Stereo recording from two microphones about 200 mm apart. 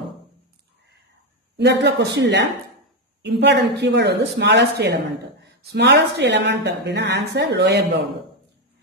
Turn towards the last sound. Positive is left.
turn(degrees=-55)  # may be behind; listen again after turning